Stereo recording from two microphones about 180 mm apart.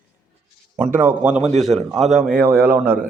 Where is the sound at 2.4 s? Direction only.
10° right (ahead or behind).